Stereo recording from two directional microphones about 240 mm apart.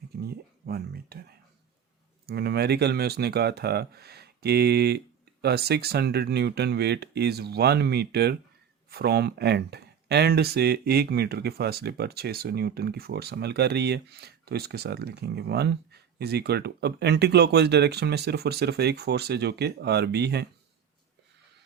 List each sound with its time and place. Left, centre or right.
0.2 s speech: right